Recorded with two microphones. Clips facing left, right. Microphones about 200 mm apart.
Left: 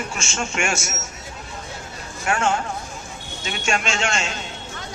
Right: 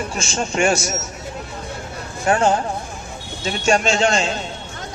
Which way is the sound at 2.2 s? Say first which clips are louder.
Right 5 dB; 35° right (ahead or behind).